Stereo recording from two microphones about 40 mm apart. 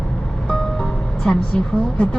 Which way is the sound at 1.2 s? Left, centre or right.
Centre.